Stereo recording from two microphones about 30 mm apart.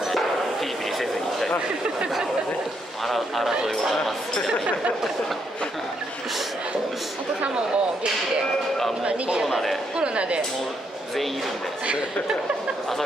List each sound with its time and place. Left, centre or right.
0.0 s a sound: centre
3.1 s a man's voice: centre
7.4 s speech: right